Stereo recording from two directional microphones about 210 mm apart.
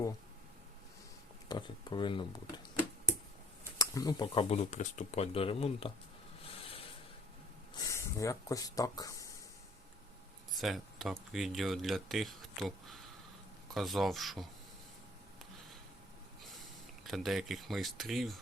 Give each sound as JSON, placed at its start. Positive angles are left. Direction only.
{"t": 1.5, "sound": "speech", "side_deg": 20}
{"t": 3.8, "sound": "speech", "side_deg": 15}
{"t": 7.8, "sound": "speech", "side_deg": 15}
{"t": 10.5, "sound": "speech", "side_deg": 0}
{"t": 16.6, "sound": "speech", "side_deg": 0}